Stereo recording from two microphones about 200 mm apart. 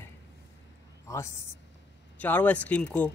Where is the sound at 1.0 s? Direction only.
15° left (ahead or behind).